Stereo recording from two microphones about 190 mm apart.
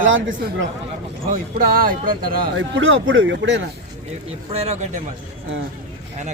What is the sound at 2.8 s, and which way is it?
Speech, 85° right.